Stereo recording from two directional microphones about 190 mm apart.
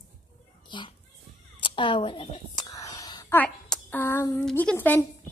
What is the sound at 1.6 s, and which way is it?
Whispering, 25° left (ahead or behind).